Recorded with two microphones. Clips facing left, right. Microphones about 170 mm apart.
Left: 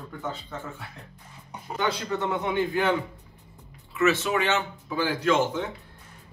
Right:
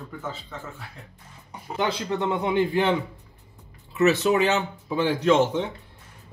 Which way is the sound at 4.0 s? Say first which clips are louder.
Right 4 dB; 35° right (ahead or behind).